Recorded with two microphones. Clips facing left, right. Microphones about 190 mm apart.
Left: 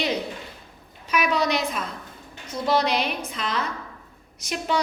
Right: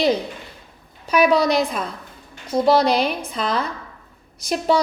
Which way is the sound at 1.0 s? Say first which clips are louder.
Right 7 dB; 35° right (ahead or behind).